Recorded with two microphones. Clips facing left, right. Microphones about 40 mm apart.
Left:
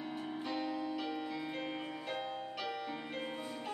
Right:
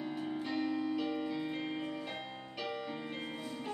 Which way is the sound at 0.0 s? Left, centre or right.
Centre.